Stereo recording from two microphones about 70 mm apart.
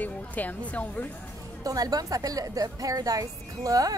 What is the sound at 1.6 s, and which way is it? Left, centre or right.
A woman's voice, right.